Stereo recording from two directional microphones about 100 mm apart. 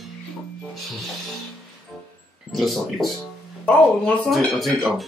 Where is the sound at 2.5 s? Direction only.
Centre (ahead or behind).